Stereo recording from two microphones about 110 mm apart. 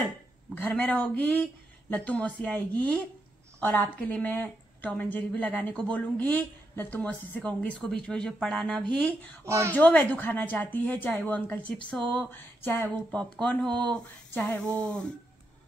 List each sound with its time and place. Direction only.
0.6 s speech: 15° left (ahead or behind)
9.4 s speech: 25° right (ahead or behind)
9.7 s speech: 15° left (ahead or behind)
12.1 s a sound: 15° left (ahead or behind)
13.1 s speech: 10° left (ahead or behind)